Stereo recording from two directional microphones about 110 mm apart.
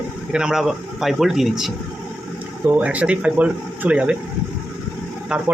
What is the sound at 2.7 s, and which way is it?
Speech, 15° right (ahead or behind).